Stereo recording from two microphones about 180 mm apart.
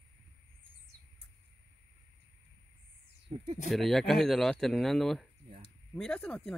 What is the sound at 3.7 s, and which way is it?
Speech, centre (ahead or behind).